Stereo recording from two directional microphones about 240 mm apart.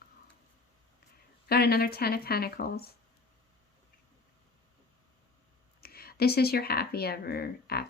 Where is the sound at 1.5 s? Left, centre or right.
Left.